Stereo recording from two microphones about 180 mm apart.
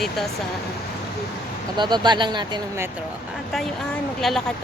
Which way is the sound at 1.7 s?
25° right (ahead or behind).